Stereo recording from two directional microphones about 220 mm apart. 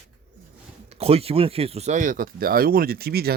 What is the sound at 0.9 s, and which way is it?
Speech, 25° right (ahead or behind).